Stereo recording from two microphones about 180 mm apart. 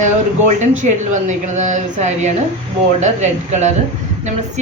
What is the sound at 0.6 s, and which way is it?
Speech, 40° right (ahead or behind).